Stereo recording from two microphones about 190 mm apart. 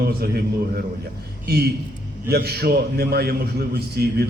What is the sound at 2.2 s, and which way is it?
A man's voice, 55° right (ahead or behind).